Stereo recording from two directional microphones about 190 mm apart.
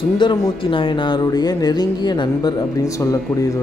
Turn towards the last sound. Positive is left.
turn(degrees=15)  # may be behind; listen again after turning